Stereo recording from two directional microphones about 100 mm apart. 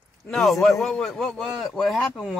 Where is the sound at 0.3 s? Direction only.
Centre (ahead or behind).